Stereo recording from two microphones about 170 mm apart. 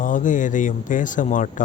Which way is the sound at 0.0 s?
50° left (ahead or behind).